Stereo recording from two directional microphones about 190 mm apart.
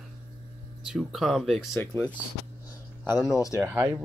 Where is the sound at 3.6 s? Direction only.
10° right (ahead or behind).